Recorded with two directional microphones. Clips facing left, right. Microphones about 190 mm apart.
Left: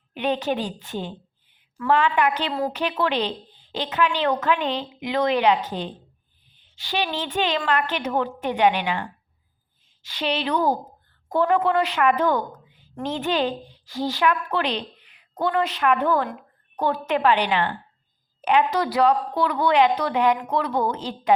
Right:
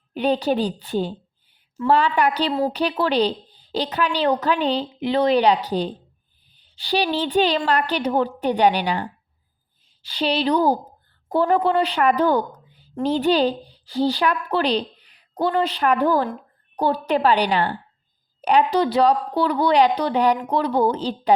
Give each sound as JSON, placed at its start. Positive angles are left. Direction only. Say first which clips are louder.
{"t": 0.1, "sound": "a woman's voice", "louder": "right 4 dB", "side_deg": -35}